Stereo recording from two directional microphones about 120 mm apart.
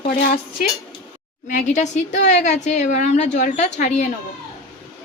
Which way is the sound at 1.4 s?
90° left.